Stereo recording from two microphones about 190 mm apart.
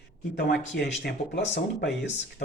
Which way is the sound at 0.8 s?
65° left (ahead or behind).